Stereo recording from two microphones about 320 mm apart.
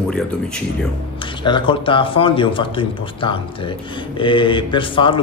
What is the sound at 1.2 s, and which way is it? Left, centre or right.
A man's voice, centre.